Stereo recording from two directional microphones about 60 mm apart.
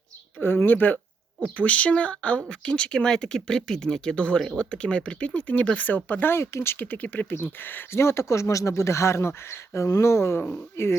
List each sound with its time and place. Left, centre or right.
0.3 s speech: left
6.7 s speech: left
8.0 s speech: left